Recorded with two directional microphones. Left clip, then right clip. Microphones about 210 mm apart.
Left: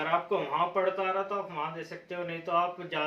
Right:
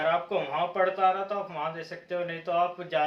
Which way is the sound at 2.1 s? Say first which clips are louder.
Right 3 dB; 20° right (ahead or behind).